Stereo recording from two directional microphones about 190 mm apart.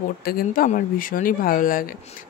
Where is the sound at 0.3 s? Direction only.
50° left (ahead or behind).